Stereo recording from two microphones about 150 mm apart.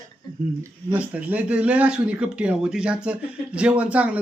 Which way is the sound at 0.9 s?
10° right (ahead or behind).